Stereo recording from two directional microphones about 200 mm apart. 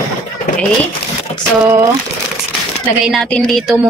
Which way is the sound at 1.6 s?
10° right (ahead or behind).